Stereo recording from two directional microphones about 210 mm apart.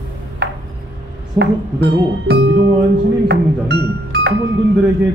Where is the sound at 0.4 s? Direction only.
45° right (ahead or behind).